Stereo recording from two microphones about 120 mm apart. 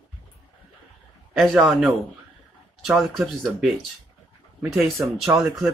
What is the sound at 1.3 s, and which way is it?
Speech, centre (ahead or behind).